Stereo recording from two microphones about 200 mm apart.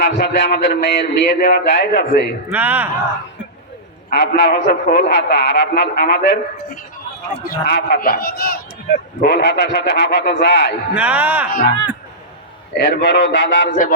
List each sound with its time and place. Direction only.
0.0 s a man's voice: 55° left (ahead or behind)
2.5 s speech: 10° right (ahead or behind)
4.1 s a man's voice: 55° left (ahead or behind)
7.4 s a man's voice: 55° left (ahead or behind)
10.9 s speech: 10° right (ahead or behind)
12.7 s a man's voice: 60° left (ahead or behind)
13.7 s a man's voice: 40° left (ahead or behind)